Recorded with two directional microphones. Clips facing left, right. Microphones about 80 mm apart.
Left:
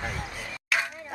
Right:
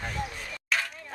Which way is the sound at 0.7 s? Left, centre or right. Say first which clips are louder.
Left 2 dB; centre.